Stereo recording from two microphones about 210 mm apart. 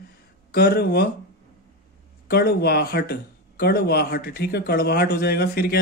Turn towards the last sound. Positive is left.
turn(degrees=50)  # may be behind; listen again after turning